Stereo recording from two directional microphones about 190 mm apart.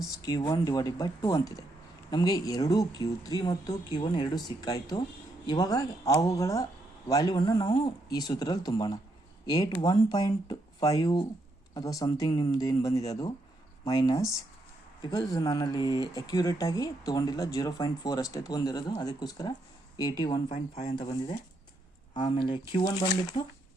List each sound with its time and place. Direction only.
0.3 s speech: 20° left (ahead or behind)